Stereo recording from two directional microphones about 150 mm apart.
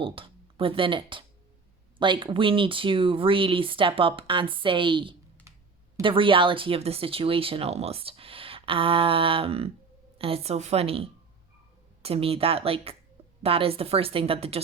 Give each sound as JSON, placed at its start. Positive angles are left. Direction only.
{"t": 0.0, "sound": "speech", "side_deg": -35}
{"t": 5.5, "sound": "computer keyboard", "side_deg": -20}
{"t": 6.0, "sound": "speech", "side_deg": -35}